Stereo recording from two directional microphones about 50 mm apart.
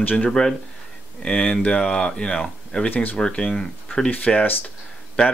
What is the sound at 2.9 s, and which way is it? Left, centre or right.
Speech, left.